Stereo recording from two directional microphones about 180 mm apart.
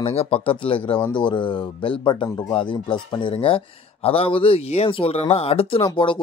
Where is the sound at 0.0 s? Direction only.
35° left (ahead or behind).